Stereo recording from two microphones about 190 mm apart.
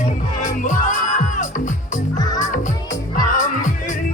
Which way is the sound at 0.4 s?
40° left (ahead or behind).